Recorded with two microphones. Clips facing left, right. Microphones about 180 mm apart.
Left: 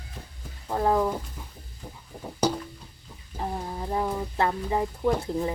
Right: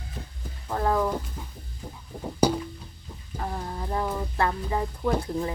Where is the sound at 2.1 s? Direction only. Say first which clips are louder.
Right 4 dB; 10° left (ahead or behind).